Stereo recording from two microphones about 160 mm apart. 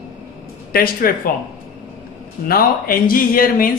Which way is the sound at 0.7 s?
65° left (ahead or behind).